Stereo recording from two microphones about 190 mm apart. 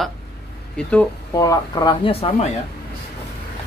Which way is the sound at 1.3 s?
15° left (ahead or behind).